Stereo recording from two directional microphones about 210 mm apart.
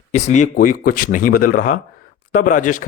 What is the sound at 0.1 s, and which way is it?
Speech, 35° left (ahead or behind).